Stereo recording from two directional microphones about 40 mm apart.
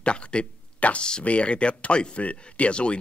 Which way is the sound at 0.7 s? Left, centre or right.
Left.